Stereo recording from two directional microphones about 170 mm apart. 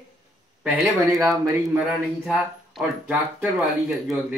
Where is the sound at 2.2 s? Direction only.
5° right (ahead or behind).